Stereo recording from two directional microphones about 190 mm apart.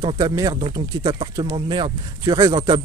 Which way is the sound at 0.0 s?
20° right (ahead or behind).